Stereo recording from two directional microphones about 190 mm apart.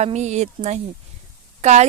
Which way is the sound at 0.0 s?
35° right (ahead or behind).